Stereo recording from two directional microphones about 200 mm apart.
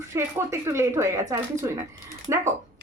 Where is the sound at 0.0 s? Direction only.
15° right (ahead or behind).